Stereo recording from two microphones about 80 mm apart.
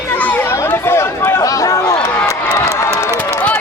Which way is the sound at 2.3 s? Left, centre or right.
Left.